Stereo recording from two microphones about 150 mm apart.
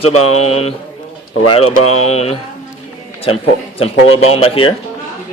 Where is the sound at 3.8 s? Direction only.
40° left (ahead or behind).